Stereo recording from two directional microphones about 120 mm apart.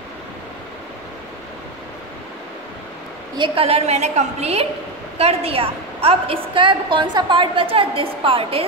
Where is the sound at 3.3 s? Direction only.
45° right (ahead or behind).